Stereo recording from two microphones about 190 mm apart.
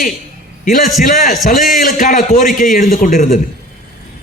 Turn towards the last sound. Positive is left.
turn(degrees=45)  # may be behind; listen again after turning